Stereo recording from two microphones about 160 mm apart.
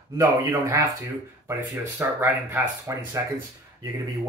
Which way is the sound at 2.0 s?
15° right (ahead or behind).